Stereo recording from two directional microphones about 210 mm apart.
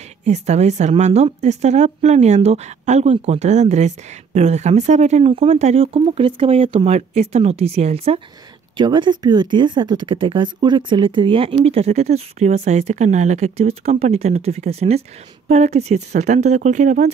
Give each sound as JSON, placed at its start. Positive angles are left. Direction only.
{"t": 0.2, "sound": "a woman's voice", "side_deg": -35}